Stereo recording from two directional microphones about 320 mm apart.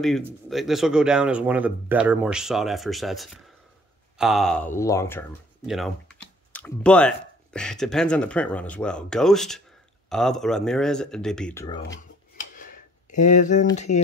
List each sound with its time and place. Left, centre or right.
0.0 s speech: centre
12.5 s a sound: left
13.7 s speech: left